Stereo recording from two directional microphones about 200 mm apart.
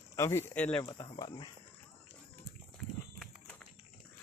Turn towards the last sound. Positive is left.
turn(degrees=5)  # may be behind; listen again after turning